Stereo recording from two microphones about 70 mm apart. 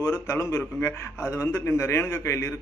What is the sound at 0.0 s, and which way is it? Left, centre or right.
A man's voice, left.